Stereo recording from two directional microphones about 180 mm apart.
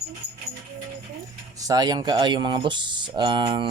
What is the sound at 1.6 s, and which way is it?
Speech, 20° right (ahead or behind).